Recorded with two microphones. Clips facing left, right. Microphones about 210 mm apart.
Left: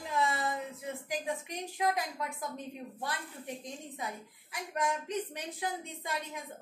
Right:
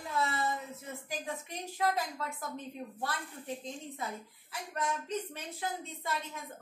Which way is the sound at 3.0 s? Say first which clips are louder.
Even; 15° left (ahead or behind).